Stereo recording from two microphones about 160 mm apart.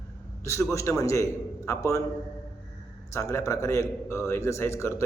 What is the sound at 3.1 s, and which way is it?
A man's voice, 20° left (ahead or behind).